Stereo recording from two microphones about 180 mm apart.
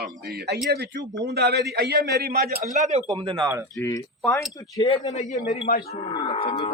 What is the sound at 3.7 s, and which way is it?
Speech, 20° left (ahead or behind).